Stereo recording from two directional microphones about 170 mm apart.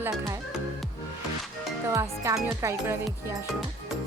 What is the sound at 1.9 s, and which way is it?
Speech, 20° right (ahead or behind).